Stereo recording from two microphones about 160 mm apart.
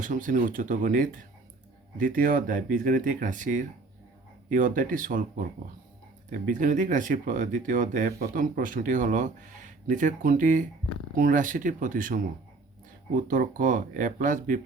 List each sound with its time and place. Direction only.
0.0 s speech: 55° right (ahead or behind)